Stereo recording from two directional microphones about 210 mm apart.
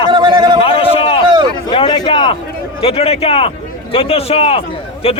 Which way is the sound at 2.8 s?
25° left (ahead or behind).